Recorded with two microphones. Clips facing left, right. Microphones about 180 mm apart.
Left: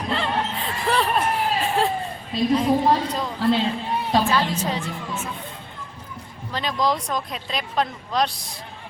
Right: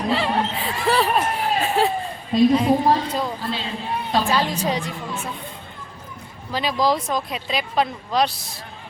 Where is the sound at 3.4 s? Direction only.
75° left (ahead or behind).